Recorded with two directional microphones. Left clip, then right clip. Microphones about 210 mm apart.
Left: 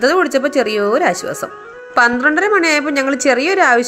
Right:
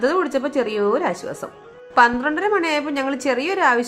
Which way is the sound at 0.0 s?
15° left (ahead or behind).